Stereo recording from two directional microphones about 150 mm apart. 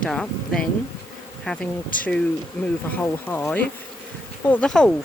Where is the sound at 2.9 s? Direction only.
10° left (ahead or behind).